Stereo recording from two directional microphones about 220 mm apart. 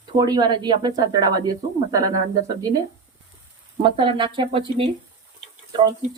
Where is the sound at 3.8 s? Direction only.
25° right (ahead or behind).